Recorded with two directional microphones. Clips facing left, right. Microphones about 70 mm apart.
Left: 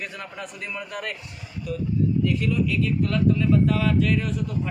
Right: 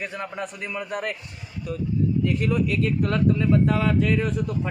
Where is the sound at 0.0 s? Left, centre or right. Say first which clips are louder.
Right 4 dB; right.